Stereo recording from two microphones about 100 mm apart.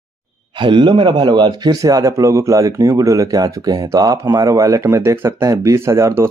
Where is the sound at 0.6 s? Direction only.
55° right (ahead or behind).